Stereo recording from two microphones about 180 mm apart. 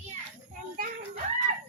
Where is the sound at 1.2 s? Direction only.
40° right (ahead or behind).